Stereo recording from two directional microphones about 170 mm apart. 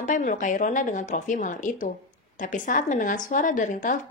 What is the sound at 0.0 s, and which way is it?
A woman's voice, 50° left (ahead or behind).